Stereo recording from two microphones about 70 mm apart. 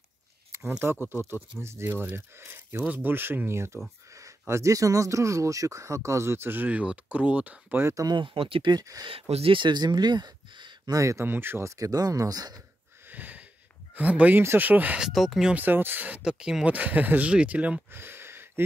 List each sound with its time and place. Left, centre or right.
0.5 s speech: right; by 7.5 s centre
8.0 s speech: right
11.0 s speech: right
11.2 s speech: right
11.7 s speech: right
13.1 s wheeze: right
13.9 s speech: right
15.0 s speech: centre
15.5 s speech: right
16.3 s speech: centre
17.9 s a sound: right